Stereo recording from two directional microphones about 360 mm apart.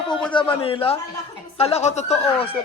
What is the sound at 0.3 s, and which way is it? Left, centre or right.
Speech, centre.